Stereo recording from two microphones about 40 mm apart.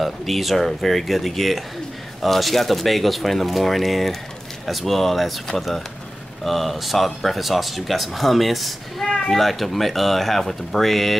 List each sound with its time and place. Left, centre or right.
0.0 s speech: centre
6.4 s speech: centre